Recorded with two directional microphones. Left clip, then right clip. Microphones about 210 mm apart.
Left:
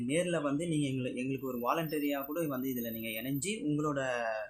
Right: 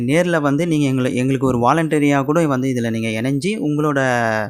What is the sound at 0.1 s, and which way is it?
Speech, 45° right (ahead or behind).